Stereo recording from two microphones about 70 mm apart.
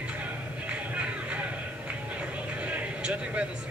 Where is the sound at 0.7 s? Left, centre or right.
Centre.